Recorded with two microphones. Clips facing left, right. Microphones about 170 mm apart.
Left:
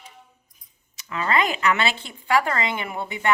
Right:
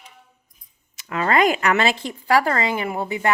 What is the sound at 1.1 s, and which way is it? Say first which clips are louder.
Speech: right 5 dB; 45° right (ahead or behind).